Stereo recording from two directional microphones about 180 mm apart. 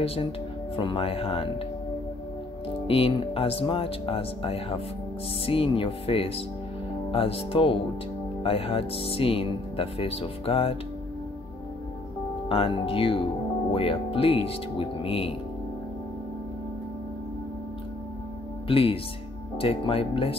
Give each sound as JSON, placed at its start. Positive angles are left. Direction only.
{"t": 0.0, "sound": "speech", "side_deg": 30}
{"t": 3.0, "sound": "speech", "side_deg": 30}
{"t": 12.4, "sound": "speech", "side_deg": 30}
{"t": 18.7, "sound": "speech", "side_deg": 30}